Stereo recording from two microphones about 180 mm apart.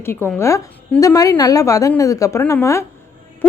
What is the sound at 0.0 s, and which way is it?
A woman's voice, 15° left (ahead or behind).